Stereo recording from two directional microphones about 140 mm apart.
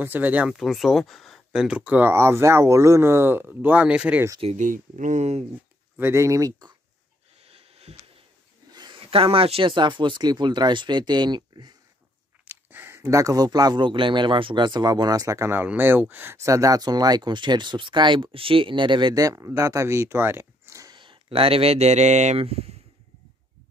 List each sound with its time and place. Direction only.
0.0 s speech: 10° right (ahead or behind)
4.6 s speech: 65° right (ahead or behind)
5.9 s speech: 20° right (ahead or behind)
7.4 s a sound: 45° right (ahead or behind)
8.7 s speech: 35° right (ahead or behind)
12.4 s speech: 15° right (ahead or behind)
21.0 s speech: 40° right (ahead or behind)